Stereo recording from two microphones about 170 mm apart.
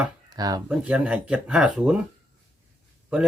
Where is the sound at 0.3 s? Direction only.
20° right (ahead or behind).